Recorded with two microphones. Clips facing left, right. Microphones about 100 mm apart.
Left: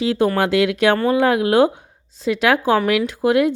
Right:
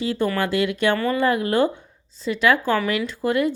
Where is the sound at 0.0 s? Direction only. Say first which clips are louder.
Left 5 dB; 75° left (ahead or behind).